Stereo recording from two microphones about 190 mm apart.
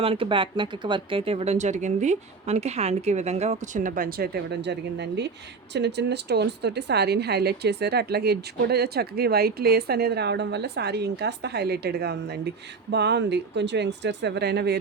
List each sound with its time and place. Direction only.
0.0 s a woman's voice: 30° right (ahead or behind); by 14.8 s 60° right (ahead or behind)